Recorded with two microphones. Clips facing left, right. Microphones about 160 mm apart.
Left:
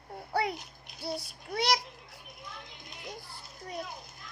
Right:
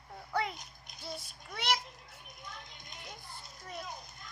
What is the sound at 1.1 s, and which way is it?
Speech, 35° left (ahead or behind).